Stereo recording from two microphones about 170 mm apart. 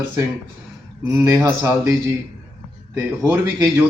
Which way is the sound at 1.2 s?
15° right (ahead or behind).